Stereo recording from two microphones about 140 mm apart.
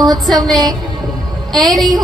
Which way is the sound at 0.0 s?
30° right (ahead or behind).